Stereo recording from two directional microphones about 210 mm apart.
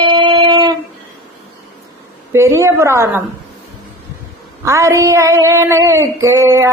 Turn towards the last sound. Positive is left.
turn(degrees=-15)  # may be behind; listen again after turning